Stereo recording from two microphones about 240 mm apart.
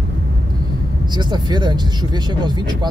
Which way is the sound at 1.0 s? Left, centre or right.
Centre.